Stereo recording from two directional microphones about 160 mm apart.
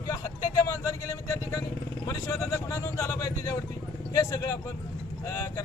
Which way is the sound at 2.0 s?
20° left (ahead or behind).